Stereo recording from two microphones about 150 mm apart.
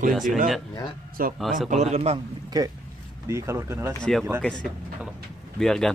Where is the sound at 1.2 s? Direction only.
70° right (ahead or behind).